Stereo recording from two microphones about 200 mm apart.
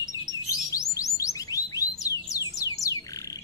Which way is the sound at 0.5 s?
15° left (ahead or behind).